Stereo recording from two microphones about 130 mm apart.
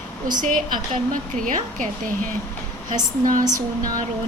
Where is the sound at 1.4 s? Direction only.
90° right.